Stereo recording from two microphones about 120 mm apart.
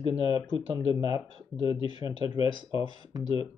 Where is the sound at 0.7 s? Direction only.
30° right (ahead or behind).